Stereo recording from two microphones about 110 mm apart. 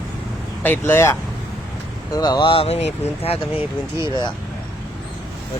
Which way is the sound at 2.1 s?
35° left (ahead or behind).